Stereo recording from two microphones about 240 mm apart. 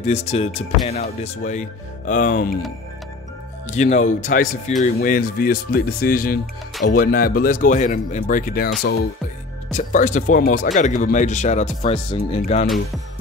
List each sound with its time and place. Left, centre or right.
0.0 s speech: left
3.6 s speech: left